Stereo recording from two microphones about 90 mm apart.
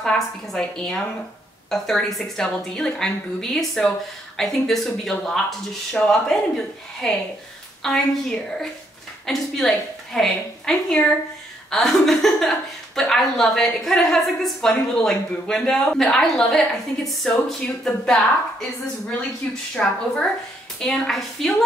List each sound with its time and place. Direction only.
0.0 s a woman's voice: 5° left (ahead or behind)